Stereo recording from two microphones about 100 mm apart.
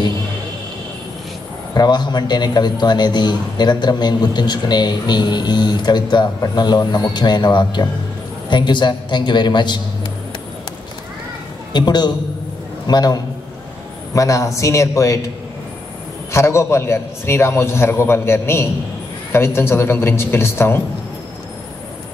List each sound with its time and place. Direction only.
1.7 s a man's voice: 45° left (ahead or behind)
11.7 s a man's voice: 45° left (ahead or behind); by 15.1 s 30° left (ahead or behind)
16.3 s a man's voice: 25° left (ahead or behind)